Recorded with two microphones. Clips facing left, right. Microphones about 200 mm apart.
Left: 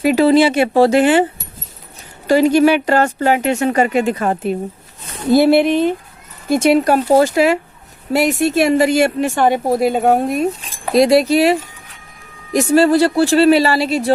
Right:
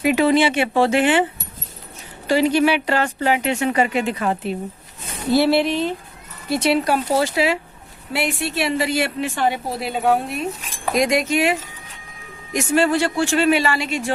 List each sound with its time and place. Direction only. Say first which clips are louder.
0.0 s speech: left 5 dB; 35° left (ahead or behind)
2.2 s speech: left 5 dB; 45° left (ahead or behind)